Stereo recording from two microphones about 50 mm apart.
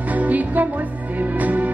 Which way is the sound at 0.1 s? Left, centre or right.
Right.